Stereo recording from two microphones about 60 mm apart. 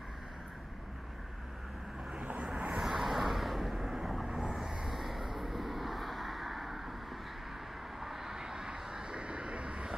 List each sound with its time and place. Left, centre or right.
2.1 s vehicle: right
2.8 s vehicle: centre
8.0 s vehicle: centre